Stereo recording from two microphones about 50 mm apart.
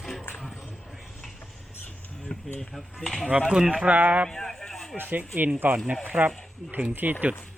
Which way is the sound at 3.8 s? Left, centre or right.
Right.